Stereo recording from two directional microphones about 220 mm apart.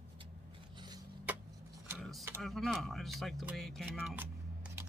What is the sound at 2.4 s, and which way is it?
Speech, centre (ahead or behind).